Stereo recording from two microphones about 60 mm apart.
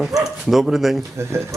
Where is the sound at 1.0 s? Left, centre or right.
Right.